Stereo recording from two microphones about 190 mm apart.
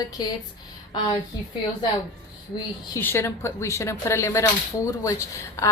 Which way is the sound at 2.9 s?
15° left (ahead or behind).